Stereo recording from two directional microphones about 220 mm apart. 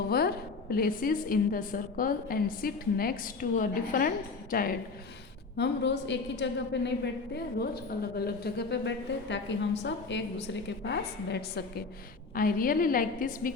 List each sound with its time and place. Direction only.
0.1 s a woman's voice: 45° left (ahead or behind)
5.5 s a woman's voice: 50° left (ahead or behind)